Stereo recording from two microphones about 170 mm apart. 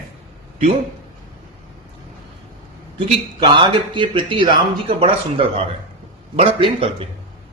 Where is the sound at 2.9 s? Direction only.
30° right (ahead or behind).